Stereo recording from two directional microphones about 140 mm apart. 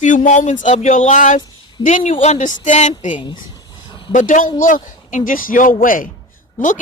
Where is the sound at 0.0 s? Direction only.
65° left (ahead or behind).